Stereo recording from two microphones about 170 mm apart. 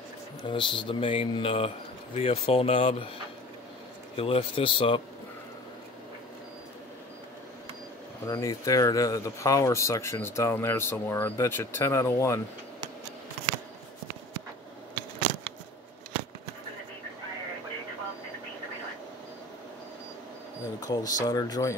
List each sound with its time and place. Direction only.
0.5 s speech: 30° left (ahead or behind)
4.2 s speech: 35° left (ahead or behind)
8.3 s speech: 20° left (ahead or behind)
20.8 s speech: 20° left (ahead or behind)